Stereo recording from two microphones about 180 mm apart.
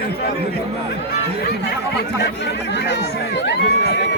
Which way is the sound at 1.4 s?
65° left (ahead or behind).